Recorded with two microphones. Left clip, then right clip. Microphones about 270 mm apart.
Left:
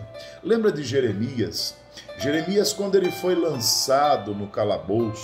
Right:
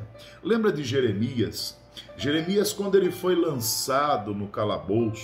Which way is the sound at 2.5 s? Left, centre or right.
Centre.